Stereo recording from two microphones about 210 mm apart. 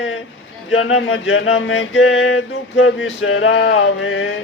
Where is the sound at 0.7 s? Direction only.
75° left (ahead or behind).